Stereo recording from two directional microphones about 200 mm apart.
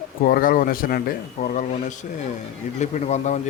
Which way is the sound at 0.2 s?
45° left (ahead or behind).